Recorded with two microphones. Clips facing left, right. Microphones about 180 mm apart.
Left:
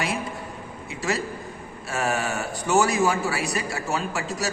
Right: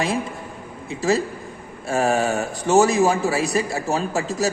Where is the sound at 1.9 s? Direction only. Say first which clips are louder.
Right 6 dB; 30° right (ahead or behind).